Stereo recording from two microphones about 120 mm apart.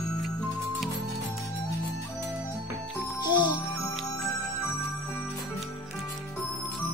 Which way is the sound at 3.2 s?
40° left (ahead or behind).